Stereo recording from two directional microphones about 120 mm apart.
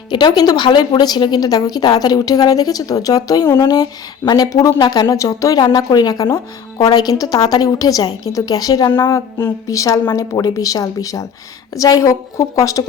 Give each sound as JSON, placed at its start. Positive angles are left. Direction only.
{"t": 0.1, "sound": "a woman's voice", "side_deg": 40}